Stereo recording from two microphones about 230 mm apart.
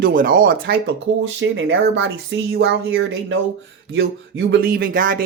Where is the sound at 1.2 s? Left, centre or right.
Right.